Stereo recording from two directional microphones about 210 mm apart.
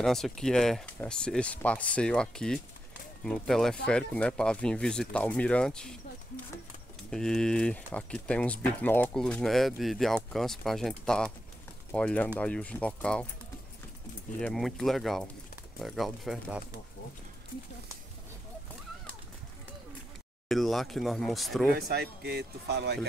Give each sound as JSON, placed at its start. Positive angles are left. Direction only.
{"t": 0.0, "sound": "speech", "side_deg": 0}
{"t": 14.4, "sound": "speech", "side_deg": 0}
{"t": 20.4, "sound": "speech", "side_deg": 0}
{"t": 21.7, "sound": "speech", "side_deg": -50}